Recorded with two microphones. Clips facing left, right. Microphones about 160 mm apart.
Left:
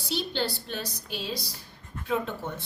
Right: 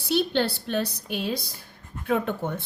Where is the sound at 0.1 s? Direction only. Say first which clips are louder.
Right 7 dB; 60° right (ahead or behind).